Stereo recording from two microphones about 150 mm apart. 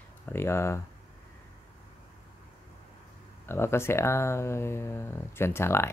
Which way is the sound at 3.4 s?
15° left (ahead or behind).